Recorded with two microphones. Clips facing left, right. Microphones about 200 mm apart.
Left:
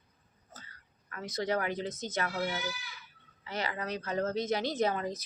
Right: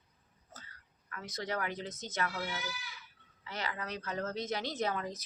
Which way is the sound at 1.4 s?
30° left (ahead or behind).